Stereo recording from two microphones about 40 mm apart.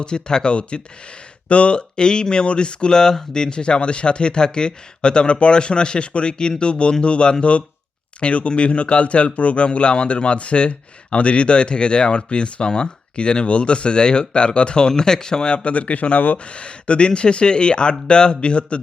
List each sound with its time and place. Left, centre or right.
0.0 s speech: left